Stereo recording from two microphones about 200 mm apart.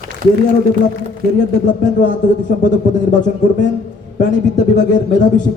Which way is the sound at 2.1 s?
40° left (ahead or behind).